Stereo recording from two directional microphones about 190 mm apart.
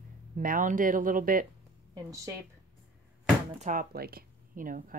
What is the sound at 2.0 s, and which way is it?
Speech, 15° right (ahead or behind).